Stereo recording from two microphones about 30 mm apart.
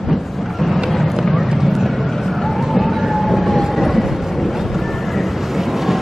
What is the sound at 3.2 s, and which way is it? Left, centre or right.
Train, centre.